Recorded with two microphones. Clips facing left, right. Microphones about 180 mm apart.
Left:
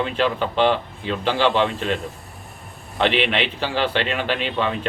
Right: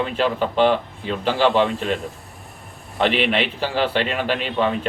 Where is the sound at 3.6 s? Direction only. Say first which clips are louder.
Right 1 dB; 10° right (ahead or behind).